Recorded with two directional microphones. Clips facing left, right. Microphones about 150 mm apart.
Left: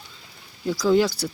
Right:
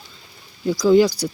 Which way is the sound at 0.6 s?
Centre (ahead or behind).